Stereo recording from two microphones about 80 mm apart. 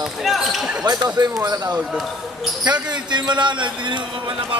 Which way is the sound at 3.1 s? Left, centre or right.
Right.